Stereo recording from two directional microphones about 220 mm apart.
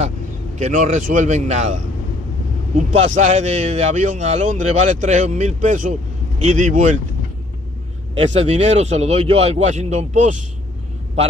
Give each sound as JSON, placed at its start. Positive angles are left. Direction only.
{"t": 0.6, "sound": "a man's voice", "side_deg": -35}
{"t": 2.9, "sound": "a man's voice", "side_deg": -30}
{"t": 8.2, "sound": "speech", "side_deg": -30}